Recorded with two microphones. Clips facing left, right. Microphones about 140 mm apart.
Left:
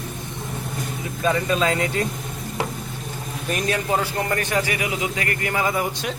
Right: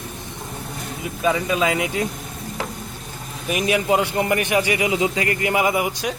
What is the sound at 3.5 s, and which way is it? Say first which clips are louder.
A man's voice: right 4 dB; 10° right (ahead or behind).